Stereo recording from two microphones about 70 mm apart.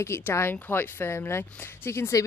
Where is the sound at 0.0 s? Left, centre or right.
Left.